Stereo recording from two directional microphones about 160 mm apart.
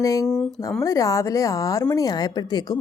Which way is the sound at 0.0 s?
20° left (ahead or behind).